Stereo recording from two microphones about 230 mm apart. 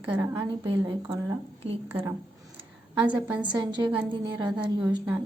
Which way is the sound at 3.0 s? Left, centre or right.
Centre.